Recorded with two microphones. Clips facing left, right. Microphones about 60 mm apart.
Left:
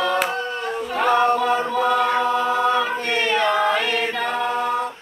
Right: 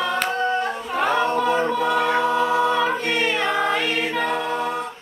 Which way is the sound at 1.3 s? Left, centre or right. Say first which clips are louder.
Left 1 dB; left.